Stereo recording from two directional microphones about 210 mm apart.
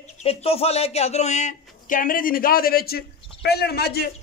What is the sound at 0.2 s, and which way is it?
Speech, 30° left (ahead or behind).